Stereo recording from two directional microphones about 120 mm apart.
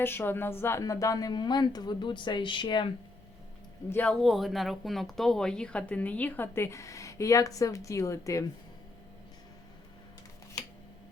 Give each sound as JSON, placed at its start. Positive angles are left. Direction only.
{"t": 0.0, "sound": "a woman's voice", "side_deg": 20}
{"t": 3.8, "sound": "speech", "side_deg": 15}
{"t": 4.2, "sound": "speech", "side_deg": 0}